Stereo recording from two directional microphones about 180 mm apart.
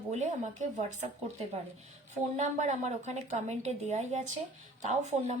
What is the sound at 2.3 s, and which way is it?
A woman's voice, 40° right (ahead or behind).